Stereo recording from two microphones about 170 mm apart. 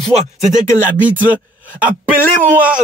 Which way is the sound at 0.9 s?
10° right (ahead or behind).